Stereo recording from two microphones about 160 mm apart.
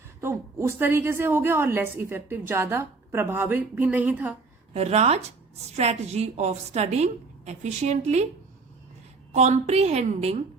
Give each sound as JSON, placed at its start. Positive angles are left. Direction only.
{"t": 0.2, "sound": "a woman's voice", "side_deg": -15}
{"t": 4.7, "sound": "a woman's voice", "side_deg": -40}
{"t": 9.3, "sound": "a woman's voice", "side_deg": -45}